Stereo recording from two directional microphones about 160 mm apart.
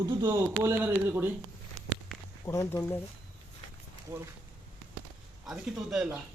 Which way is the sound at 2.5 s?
15° left (ahead or behind).